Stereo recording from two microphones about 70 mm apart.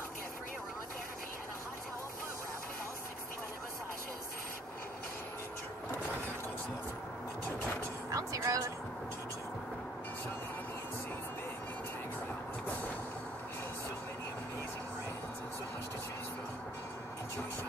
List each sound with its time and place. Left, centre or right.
8.1 s music: right